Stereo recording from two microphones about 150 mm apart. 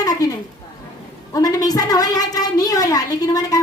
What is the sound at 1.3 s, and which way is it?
A woman's voice, 25° left (ahead or behind).